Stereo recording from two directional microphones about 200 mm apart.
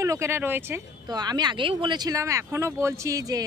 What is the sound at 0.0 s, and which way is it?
Speech, 15° right (ahead or behind).